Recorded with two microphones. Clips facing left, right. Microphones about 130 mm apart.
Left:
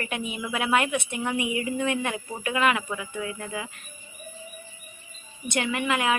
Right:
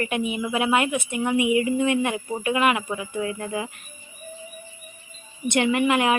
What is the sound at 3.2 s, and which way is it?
Speech, 30° right (ahead or behind).